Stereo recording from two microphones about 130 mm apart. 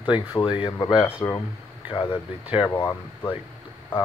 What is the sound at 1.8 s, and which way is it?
Speech, 40° left (ahead or behind).